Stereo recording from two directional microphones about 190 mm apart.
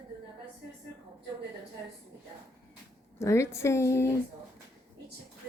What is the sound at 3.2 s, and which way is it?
Speech, 15° left (ahead or behind).